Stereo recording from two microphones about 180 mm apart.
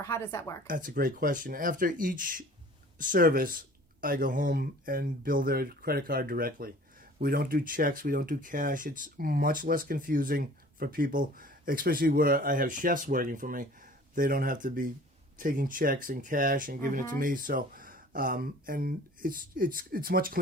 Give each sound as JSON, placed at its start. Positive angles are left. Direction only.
{"t": 0.0, "sound": "speech", "side_deg": 15}
{"t": 0.7, "sound": "speech", "side_deg": -50}